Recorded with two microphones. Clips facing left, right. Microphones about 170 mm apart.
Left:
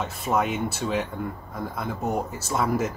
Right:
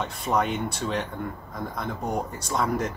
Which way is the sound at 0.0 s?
Centre (ahead or behind).